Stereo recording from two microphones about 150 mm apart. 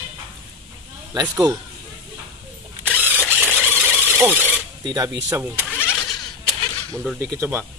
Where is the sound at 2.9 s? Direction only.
10° left (ahead or behind).